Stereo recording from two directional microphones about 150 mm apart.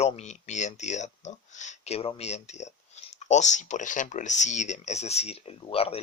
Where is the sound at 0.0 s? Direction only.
50° left (ahead or behind).